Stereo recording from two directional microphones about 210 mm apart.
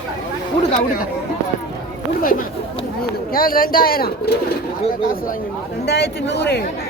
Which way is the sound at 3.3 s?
45° left (ahead or behind).